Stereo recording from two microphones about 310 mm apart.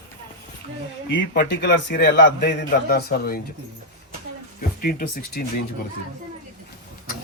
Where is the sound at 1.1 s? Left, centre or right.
Left.